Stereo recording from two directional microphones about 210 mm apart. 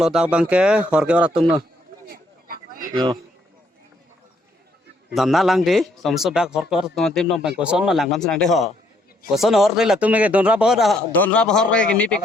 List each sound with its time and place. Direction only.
0.0 s a man's voice: 5° right (ahead or behind)
2.9 s a man's voice: 20° right (ahead or behind)
5.1 s a man's voice: centre (ahead or behind)